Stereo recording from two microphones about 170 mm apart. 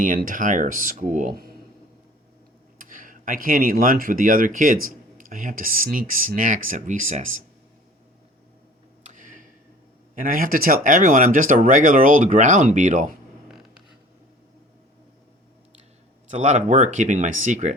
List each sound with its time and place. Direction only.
0.0 s speech: 55° right (ahead or behind)
2.7 s speech: 55° right (ahead or behind)
9.0 s tick-tock: 50° right (ahead or behind)
10.2 s speech: 55° right (ahead or behind)
16.3 s speech: 45° right (ahead or behind)